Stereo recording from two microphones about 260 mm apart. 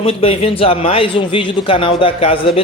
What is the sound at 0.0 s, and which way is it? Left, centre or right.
A man's voice, left.